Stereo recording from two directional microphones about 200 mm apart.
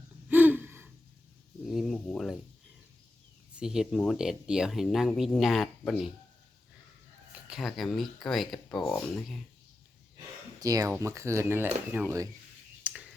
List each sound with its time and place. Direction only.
0.3 s gasp: 10° right (ahead or behind)
1.6 s a sound: centre (ahead or behind)
3.5 s speech: 5° right (ahead or behind)
7.4 s speech: centre (ahead or behind)
10.6 s speech: 15° right (ahead or behind)
12.8 s a sound: 5° right (ahead or behind)